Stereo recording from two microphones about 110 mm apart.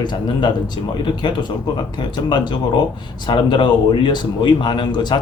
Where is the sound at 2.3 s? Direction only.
45° left (ahead or behind).